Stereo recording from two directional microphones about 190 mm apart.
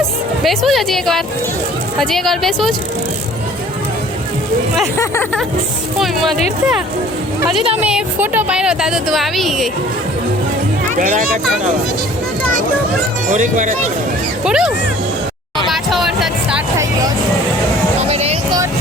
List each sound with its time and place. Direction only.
0.4 s speech: centre (ahead or behind)
4.9 s speech: 15° left (ahead or behind)
7.8 s speech: 5° right (ahead or behind)
10.9 s speech: 40° right (ahead or behind)
13.3 s speech: 40° right (ahead or behind)
14.4 s speech: centre (ahead or behind)
15.7 s music: centre (ahead or behind)
18.1 s music: 30° right (ahead or behind)